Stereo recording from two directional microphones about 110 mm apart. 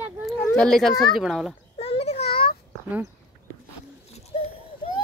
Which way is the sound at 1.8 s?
65° left (ahead or behind).